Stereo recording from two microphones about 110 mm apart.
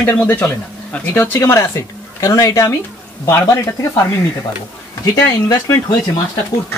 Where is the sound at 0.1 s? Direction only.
20° left (ahead or behind).